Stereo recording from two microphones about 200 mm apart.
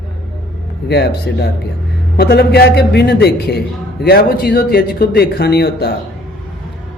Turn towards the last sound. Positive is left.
turn(degrees=55)  # may be behind; listen again after turning